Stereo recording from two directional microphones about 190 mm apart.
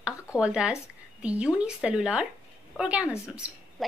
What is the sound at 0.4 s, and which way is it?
A woman's voice, 5° right (ahead or behind).